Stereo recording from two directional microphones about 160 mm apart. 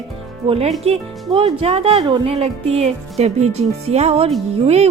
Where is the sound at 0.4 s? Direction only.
35° right (ahead or behind).